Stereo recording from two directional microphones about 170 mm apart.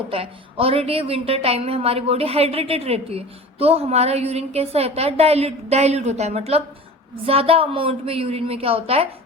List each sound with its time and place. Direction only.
0.1 s a woman's voice: 35° right (ahead or behind)